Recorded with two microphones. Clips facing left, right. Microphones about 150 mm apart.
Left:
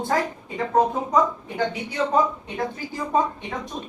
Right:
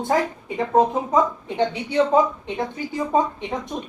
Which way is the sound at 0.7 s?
20° right (ahead or behind).